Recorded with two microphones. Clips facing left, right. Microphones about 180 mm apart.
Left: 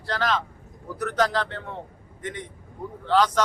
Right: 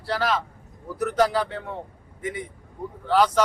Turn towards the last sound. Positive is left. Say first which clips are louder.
# right 1 dB
turn(degrees=-10)  # may be behind; listen again after turning